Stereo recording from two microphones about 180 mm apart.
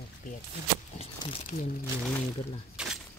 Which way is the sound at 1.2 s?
25° left (ahead or behind).